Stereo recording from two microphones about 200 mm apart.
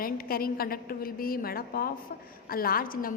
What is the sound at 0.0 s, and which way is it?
A woman's voice, 45° left (ahead or behind).